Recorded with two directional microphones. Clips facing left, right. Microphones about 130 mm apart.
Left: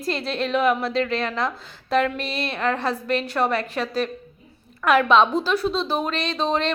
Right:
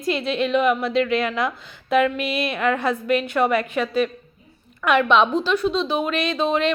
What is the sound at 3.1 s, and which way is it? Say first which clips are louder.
Speech: right 3 dB; 30° left (ahead or behind).